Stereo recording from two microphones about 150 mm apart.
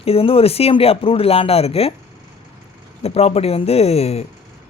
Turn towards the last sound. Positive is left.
turn(degrees=45)  # may be behind; listen again after turning